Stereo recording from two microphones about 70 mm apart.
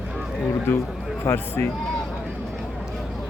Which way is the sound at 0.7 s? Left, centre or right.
Left.